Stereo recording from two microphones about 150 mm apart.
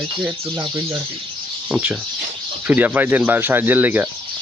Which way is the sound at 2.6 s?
10° right (ahead or behind).